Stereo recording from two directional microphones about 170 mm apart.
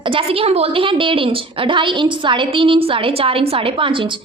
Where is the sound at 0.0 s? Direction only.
30° right (ahead or behind).